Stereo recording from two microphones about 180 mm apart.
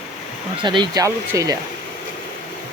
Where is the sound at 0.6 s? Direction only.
25° right (ahead or behind).